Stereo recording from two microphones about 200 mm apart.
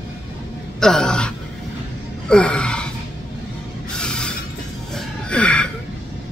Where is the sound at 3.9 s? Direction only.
5° left (ahead or behind).